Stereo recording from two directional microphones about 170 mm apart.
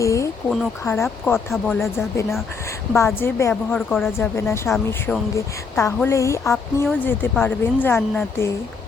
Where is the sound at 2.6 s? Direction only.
15° left (ahead or behind).